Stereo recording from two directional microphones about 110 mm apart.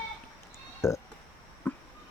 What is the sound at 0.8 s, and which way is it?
Speech, 25° left (ahead or behind).